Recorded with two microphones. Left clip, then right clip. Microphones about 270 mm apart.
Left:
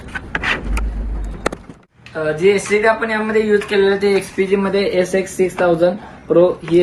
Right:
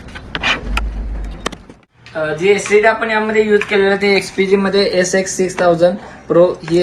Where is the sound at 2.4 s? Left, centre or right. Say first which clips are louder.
Right 2 dB; centre.